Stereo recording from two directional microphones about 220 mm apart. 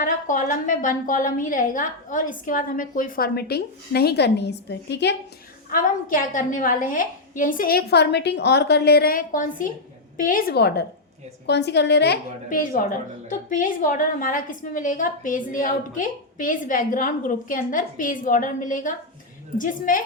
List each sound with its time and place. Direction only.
0.0 s a woman's voice: 35° left (ahead or behind)
5.7 s a woman's voice: 40° left (ahead or behind)